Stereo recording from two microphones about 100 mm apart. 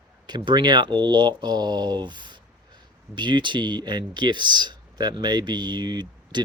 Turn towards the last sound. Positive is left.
turn(degrees=-45)  # may be behind; listen again after turning